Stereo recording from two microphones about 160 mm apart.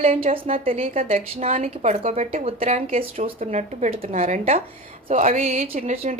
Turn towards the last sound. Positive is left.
turn(degrees=-50)  # may be behind; listen again after turning